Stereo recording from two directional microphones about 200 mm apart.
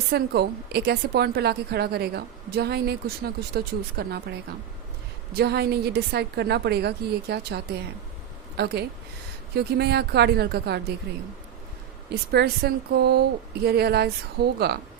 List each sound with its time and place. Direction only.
0.1 s a woman's voice: 55° right (ahead or behind)
5.4 s a woman's voice: 55° right (ahead or behind)
12.3 s a woman's voice: 55° right (ahead or behind)